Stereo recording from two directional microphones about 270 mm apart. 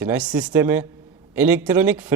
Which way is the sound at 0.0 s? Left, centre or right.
Centre.